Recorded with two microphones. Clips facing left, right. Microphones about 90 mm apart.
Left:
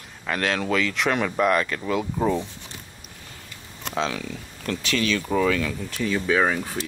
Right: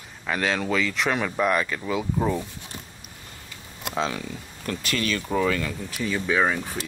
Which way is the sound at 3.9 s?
5° right (ahead or behind).